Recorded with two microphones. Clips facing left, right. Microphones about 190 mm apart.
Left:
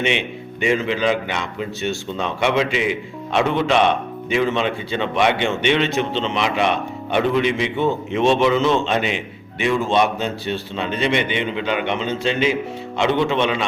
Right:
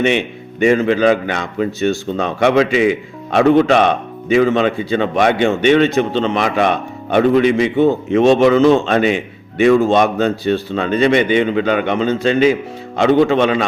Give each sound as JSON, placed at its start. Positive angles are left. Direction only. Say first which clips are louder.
{"t": 0.0, "sound": "a man's voice", "louder": "right 6 dB", "side_deg": -45}